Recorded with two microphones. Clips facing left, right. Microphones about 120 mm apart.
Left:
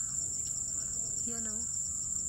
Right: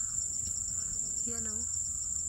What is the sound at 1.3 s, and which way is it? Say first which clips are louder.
Speech: even; centre (ahead or behind).